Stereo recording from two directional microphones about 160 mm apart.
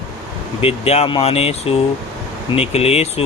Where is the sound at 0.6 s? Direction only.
40° left (ahead or behind).